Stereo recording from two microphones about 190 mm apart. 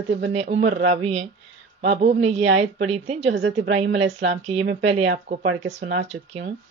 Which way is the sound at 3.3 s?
70° right (ahead or behind).